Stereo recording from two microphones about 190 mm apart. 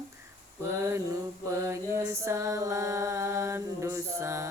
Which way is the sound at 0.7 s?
15° right (ahead or behind).